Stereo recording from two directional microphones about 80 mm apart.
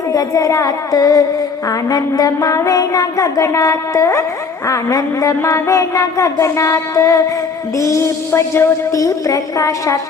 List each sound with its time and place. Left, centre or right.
0.1 s a woman's voice: left
2.6 s music: left
8.9 s a woman's voice: left